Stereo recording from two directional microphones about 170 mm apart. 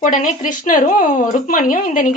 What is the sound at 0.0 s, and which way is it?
A woman's voice, 50° left (ahead or behind).